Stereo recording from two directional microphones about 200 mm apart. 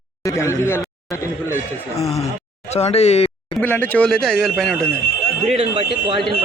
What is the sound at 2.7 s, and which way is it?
Speech, 30° left (ahead or behind).